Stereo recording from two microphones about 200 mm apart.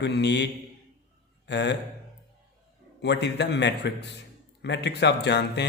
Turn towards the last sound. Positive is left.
turn(degrees=60)  # may be behind; listen again after turning